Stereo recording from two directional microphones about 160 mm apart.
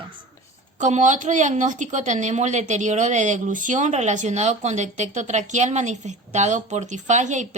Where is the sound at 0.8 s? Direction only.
50° right (ahead or behind).